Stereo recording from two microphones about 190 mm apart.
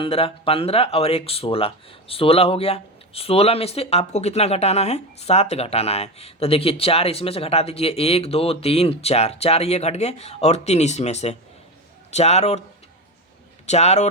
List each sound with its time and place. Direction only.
0.0 s speech: 30° left (ahead or behind)
13.7 s speech: 35° left (ahead or behind)